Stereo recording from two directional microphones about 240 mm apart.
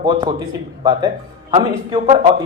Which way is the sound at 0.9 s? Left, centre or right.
Centre.